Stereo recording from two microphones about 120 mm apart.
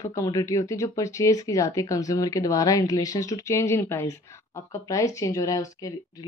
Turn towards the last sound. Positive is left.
turn(degrees=30)  # may be behind; listen again after turning